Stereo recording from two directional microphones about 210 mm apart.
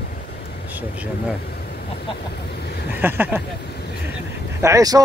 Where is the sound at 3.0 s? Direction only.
10° right (ahead or behind).